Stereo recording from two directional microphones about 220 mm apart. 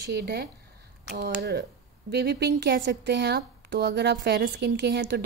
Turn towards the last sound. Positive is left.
turn(degrees=-50)  # may be behind; listen again after turning